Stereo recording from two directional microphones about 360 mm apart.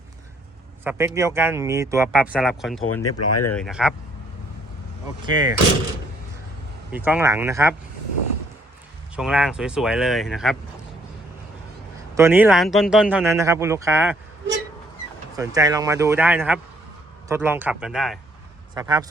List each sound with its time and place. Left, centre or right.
0.9 s speech: centre
2.8 s speech: left
3.5 s speech: centre
5.3 s speech: centre
6.9 s speech: centre
9.1 s speech: centre
12.1 s speech: centre
15.4 s speech: centre